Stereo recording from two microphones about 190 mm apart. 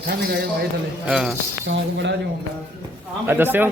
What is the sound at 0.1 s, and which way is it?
Speech, 55° right (ahead or behind).